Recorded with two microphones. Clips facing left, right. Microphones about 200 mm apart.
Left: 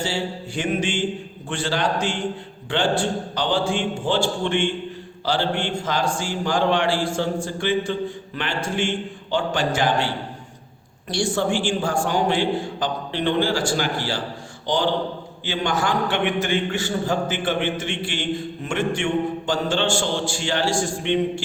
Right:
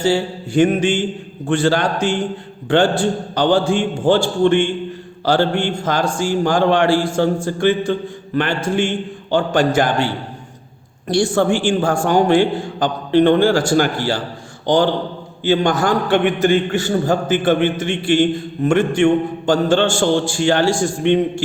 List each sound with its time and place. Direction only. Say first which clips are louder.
0.0 s a man's voice: right 8 dB; 45° right (ahead or behind)
11.1 s a man's voice: right 6 dB; 50° right (ahead or behind)
15.4 s a man's voice: right 8 dB; 40° right (ahead or behind)